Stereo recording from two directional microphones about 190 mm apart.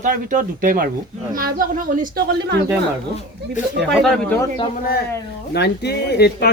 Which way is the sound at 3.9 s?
Centre (ahead or behind).